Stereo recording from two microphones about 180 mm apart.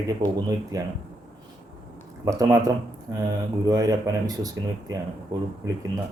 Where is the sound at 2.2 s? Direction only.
20° right (ahead or behind).